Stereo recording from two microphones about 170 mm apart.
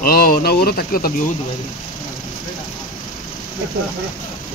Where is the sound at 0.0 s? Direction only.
60° left (ahead or behind).